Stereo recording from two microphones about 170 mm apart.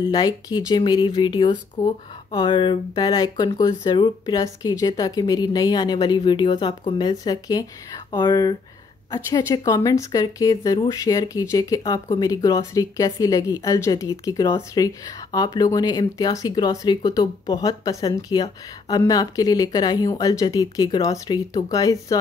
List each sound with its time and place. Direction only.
0.1 s a woman's voice: 25° left (ahead or behind)